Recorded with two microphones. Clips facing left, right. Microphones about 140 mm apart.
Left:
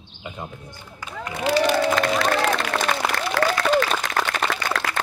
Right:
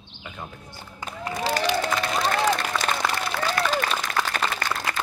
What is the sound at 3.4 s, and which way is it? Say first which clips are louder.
Applause: left 6 dB; 90° left.